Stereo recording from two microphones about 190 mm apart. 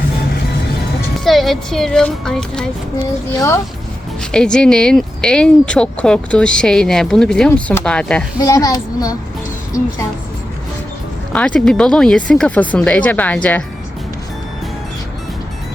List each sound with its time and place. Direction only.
1.2 s speech: centre (ahead or behind)
4.2 s speech: 5° left (ahead or behind)
8.4 s a child's voice: 20° left (ahead or behind)
11.3 s speech: 5° left (ahead or behind)